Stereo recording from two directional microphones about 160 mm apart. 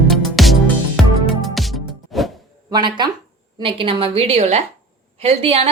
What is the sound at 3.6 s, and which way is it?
A woman's voice, 35° right (ahead or behind).